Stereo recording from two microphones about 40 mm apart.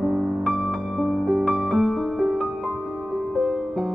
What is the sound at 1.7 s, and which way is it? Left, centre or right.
Music, centre.